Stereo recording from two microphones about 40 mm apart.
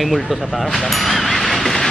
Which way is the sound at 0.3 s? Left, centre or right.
Centre.